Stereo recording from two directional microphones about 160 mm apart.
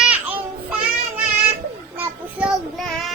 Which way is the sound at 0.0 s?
10° right (ahead or behind).